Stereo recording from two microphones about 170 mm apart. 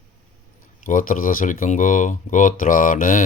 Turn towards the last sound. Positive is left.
turn(degrees=55)  # may be behind; listen again after turning